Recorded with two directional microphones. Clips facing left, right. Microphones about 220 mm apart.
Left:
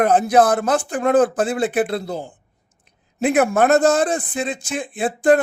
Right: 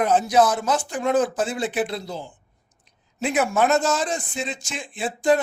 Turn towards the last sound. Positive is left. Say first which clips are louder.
# left 5 dB
turn(degrees=55)  # may be behind; listen again after turning